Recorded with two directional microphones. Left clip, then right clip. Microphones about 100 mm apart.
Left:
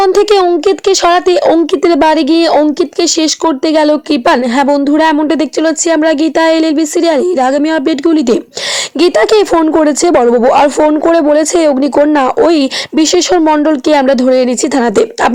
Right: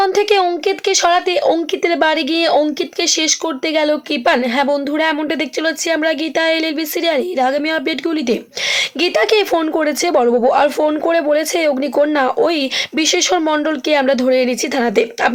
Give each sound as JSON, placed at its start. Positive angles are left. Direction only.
{"t": 0.0, "sound": "a child's voice", "side_deg": 65}